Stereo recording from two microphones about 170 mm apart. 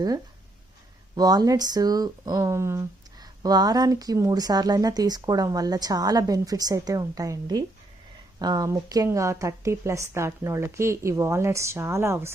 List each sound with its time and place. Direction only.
1.1 s speech: 20° right (ahead or behind)